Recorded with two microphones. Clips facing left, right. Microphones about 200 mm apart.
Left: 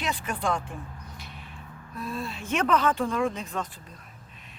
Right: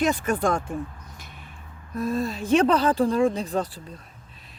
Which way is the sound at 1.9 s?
45° right (ahead or behind).